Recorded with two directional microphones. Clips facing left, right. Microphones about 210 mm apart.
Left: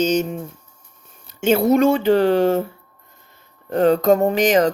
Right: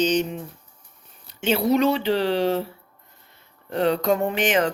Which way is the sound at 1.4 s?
45° left (ahead or behind).